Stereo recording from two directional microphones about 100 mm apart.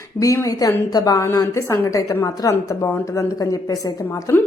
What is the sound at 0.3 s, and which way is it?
A woman's voice, 35° left (ahead or behind).